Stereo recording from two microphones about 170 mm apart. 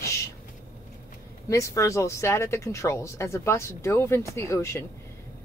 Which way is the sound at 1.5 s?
20° left (ahead or behind).